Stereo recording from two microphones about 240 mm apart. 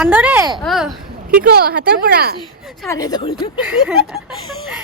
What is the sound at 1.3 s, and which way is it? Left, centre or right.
Speech, right.